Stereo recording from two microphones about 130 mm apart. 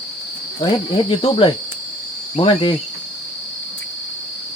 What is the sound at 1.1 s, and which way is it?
Speech, 45° left (ahead or behind).